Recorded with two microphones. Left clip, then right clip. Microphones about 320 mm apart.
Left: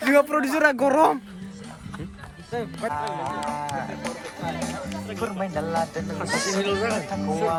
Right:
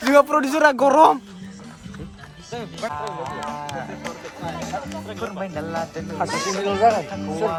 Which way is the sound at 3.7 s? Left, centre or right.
Left.